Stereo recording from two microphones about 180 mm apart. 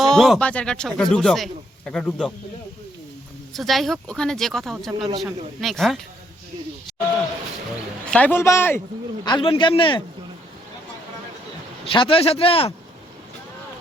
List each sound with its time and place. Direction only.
0.0 s speech: centre (ahead or behind)
3.5 s speech: centre (ahead or behind)
8.1 s a man's voice: 10° left (ahead or behind)
9.2 s speech: 25° left (ahead or behind)
11.9 s speech: 30° left (ahead or behind)